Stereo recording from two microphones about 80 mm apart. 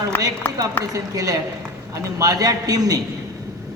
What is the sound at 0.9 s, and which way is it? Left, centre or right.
A man's voice, right.